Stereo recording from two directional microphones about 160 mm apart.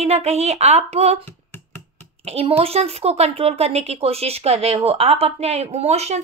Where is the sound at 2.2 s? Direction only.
40° right (ahead or behind).